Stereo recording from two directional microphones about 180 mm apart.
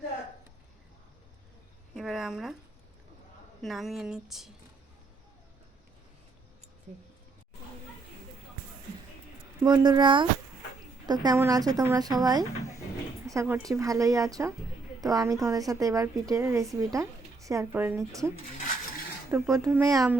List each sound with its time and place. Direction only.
2.0 s a woman's voice: centre (ahead or behind)
3.6 s a woman's voice: centre (ahead or behind)
9.6 s a woman's voice: 25° right (ahead or behind)
19.3 s a woman's voice: 15° right (ahead or behind)